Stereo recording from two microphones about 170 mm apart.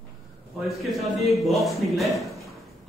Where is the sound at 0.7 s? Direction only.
Centre (ahead or behind).